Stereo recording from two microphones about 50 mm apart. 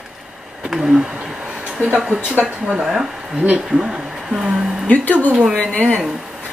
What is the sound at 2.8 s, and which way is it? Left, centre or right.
Speech, centre.